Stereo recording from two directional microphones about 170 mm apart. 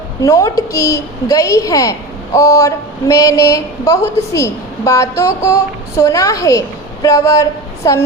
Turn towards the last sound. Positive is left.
turn(degrees=20)  # may be behind; listen again after turning